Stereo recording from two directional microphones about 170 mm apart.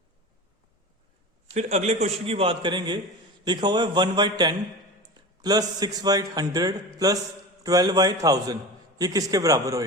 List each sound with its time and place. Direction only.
1.5 s a man's voice: 40° right (ahead or behind); by 9.8 s 20° right (ahead or behind)